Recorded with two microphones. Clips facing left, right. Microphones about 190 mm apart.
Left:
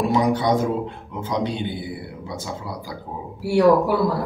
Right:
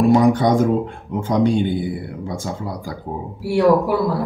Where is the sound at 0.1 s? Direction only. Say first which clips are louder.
Right 5 dB; 50° right (ahead or behind).